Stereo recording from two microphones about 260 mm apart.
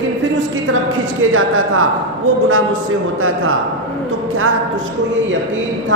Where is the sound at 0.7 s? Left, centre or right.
Right.